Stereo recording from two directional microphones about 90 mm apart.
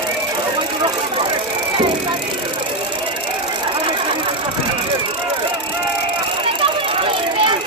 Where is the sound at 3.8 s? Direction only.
70° right (ahead or behind).